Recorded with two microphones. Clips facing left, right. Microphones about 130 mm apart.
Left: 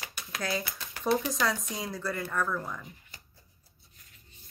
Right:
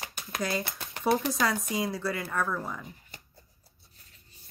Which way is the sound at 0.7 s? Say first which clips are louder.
Right 1 dB; 50° right (ahead or behind).